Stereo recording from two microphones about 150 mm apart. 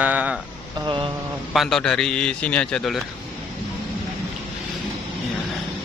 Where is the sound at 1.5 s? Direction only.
Centre (ahead or behind).